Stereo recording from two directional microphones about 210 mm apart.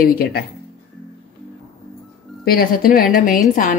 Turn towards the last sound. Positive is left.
turn(degrees=40)  # may be behind; listen again after turning